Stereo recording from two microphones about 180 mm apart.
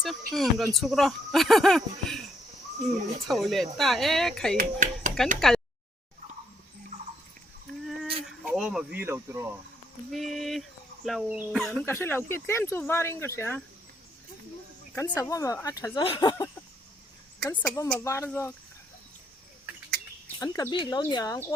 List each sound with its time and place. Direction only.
0.3 s speech: centre (ahead or behind)
3.2 s speech: centre (ahead or behind)
4.5 s a sound: 45° right (ahead or behind)
5.5 s a sound: centre (ahead or behind)
7.9 s a sound: centre (ahead or behind)
10.1 s speech: centre (ahead or behind)
14.9 s speech: 20° left (ahead or behind)
17.4 s speech: 10° left (ahead or behind)
20.2 s speech: 15° left (ahead or behind)